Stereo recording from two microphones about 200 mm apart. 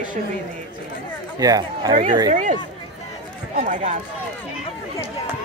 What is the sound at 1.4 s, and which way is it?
Speech, 20° right (ahead or behind).